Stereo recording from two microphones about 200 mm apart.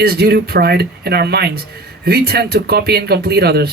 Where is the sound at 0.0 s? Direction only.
50° right (ahead or behind).